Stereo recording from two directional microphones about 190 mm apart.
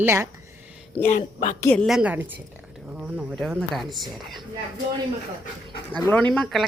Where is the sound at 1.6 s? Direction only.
10° left (ahead or behind).